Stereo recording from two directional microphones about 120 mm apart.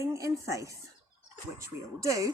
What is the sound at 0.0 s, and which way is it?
Speech, 25° right (ahead or behind).